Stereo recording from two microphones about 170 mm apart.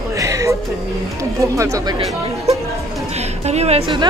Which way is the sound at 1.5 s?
20° right (ahead or behind).